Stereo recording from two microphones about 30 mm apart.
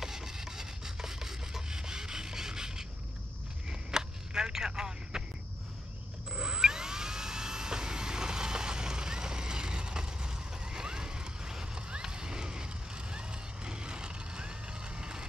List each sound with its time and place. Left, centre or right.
0.0 s rub: centre
3.9 s telephone: right
6.3 s a sound: right
12.0 s vehicle: right